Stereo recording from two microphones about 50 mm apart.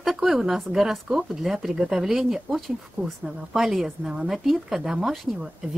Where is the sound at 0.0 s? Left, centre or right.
Centre.